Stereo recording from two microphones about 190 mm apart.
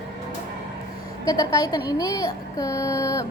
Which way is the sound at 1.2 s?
15° left (ahead or behind).